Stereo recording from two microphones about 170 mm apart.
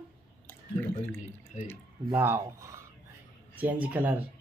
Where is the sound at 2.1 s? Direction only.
15° right (ahead or behind).